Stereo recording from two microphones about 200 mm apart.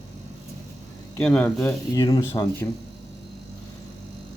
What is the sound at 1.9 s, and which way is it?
Speech, 20° left (ahead or behind).